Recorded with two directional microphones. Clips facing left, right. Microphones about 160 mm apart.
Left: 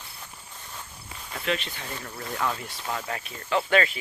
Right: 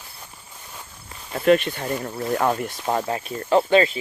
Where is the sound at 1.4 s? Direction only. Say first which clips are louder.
Right 13 dB; 50° right (ahead or behind).